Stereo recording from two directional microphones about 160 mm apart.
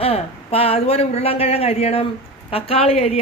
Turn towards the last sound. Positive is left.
turn(degrees=40)  # may be behind; listen again after turning